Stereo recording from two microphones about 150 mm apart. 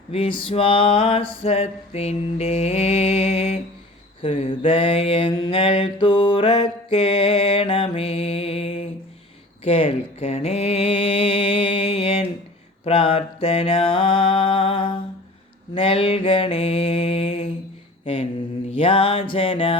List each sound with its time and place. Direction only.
0.1 s male singing: 35° left (ahead or behind)
4.3 s mantra: 40° left (ahead or behind)
9.6 s a sound: 35° left (ahead or behind)
12.8 s mantra: 35° left (ahead or behind)